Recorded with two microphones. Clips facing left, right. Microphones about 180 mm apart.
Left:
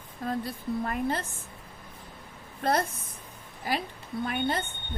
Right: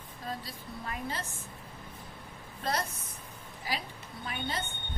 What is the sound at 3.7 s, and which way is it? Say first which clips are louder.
Speech: left 6 dB; 50° left (ahead or behind).